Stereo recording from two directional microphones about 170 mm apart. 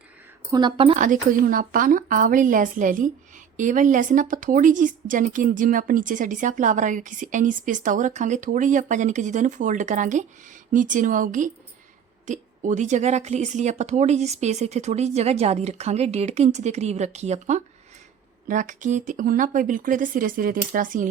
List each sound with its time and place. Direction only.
0.5 s a woman's voice: 30° right (ahead or behind)
0.9 s a woman's voice: 50° right (ahead or behind)